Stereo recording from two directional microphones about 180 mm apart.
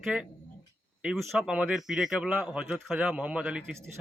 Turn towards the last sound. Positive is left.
turn(degrees=-5)  # may be behind; listen again after turning